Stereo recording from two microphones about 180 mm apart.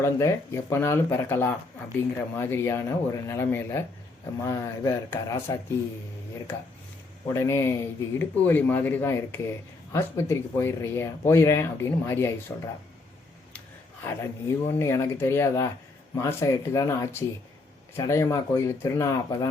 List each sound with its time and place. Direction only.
0.0 s speech: 15° left (ahead or behind)
7.3 s speech: 15° left (ahead or behind)
14.0 s speech: 15° left (ahead or behind)